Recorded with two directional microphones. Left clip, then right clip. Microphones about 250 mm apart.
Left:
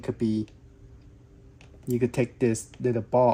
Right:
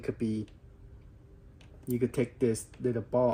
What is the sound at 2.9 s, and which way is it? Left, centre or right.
Speech, left.